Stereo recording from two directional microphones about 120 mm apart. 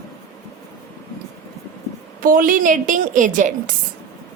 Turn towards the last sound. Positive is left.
turn(degrees=-90)